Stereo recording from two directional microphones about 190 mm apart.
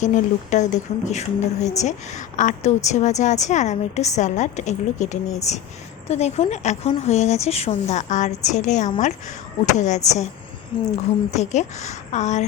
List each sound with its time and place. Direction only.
0.0 s speech: 40° left (ahead or behind)